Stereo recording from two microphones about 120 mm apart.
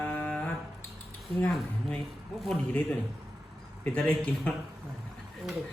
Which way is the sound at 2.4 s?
5° left (ahead or behind).